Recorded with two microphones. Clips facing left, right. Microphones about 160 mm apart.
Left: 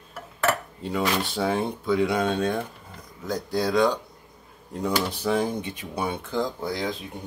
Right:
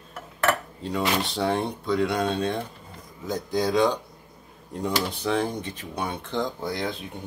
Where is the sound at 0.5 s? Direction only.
5° left (ahead or behind).